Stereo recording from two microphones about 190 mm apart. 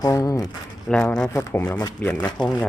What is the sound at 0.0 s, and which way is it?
Speech, 15° left (ahead or behind).